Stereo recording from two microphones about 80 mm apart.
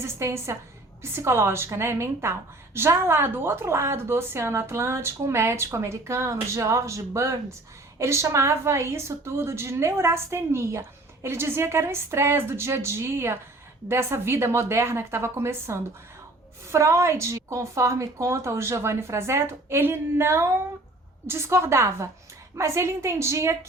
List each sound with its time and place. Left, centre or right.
0.0 s a woman's voice: right